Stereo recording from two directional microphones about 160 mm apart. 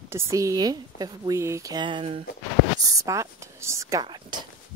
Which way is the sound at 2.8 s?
20° right (ahead or behind).